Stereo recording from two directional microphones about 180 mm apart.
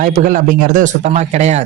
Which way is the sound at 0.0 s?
50° right (ahead or behind).